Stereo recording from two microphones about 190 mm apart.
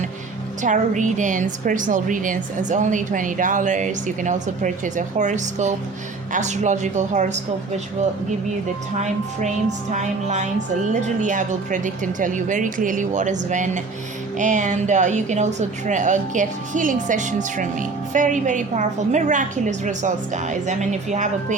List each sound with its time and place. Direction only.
0.6 s a woman's voice: 40° right (ahead or behind)
9.9 s a woman's voice: 40° right (ahead or behind)